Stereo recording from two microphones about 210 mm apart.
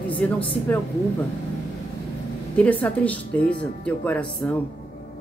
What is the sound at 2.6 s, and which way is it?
Speech, 5° left (ahead or behind).